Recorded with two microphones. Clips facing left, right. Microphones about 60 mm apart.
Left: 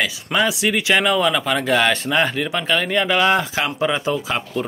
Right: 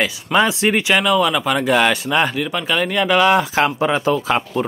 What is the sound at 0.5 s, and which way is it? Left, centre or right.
Speech, right.